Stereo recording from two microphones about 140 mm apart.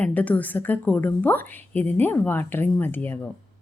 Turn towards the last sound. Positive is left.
turn(degrees=15)  # may be behind; listen again after turning